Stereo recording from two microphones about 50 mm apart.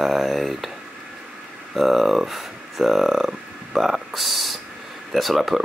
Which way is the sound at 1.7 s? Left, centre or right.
Centre.